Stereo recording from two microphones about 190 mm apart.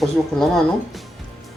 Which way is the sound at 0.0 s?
Centre (ahead or behind).